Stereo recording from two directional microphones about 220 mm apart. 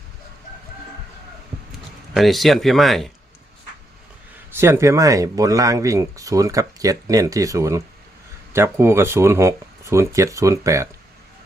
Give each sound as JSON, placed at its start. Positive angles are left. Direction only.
{"t": 2.1, "sound": "speech", "side_deg": 0}
{"t": 4.5, "sound": "speech", "side_deg": -10}